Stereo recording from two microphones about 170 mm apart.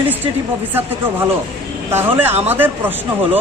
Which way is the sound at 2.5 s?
10° right (ahead or behind).